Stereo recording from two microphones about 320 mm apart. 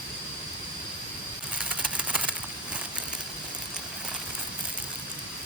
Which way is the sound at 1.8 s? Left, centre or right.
Centre.